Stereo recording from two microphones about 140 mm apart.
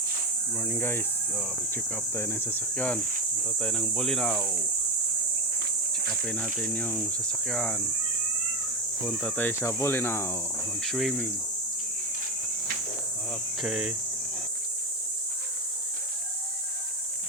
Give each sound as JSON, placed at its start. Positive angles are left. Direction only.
{"t": 0.5, "sound": "speech", "side_deg": 15}
{"t": 6.1, "sound": "speech", "side_deg": 5}
{"t": 9.3, "sound": "speech", "side_deg": 15}
{"t": 10.8, "sound": "speech", "side_deg": 0}
{"t": 13.6, "sound": "speech", "side_deg": -5}